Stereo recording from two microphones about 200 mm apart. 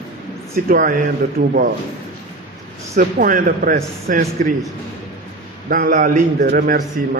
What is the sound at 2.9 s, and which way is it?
Speech, 40° right (ahead or behind).